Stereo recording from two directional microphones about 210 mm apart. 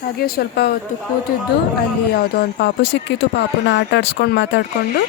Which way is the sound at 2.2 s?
50° left (ahead or behind).